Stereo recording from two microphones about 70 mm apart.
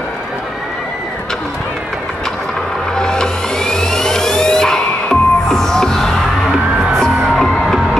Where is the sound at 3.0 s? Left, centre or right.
Centre.